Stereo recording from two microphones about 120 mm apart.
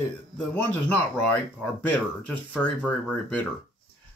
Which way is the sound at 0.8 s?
15° left (ahead or behind).